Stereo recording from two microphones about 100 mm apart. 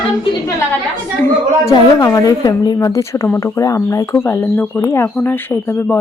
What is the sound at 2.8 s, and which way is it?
A woman's voice, 30° left (ahead or behind).